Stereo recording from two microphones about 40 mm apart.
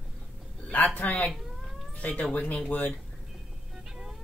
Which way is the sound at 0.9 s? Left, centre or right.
Left.